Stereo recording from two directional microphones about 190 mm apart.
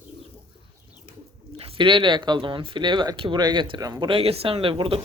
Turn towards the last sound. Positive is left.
turn(degrees=-30)  # may be behind; listen again after turning